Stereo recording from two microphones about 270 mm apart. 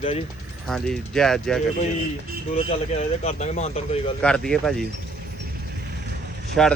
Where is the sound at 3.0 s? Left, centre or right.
Left.